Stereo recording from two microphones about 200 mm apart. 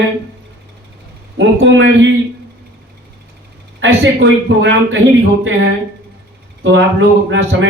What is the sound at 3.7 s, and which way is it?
Speech, 65° right (ahead or behind).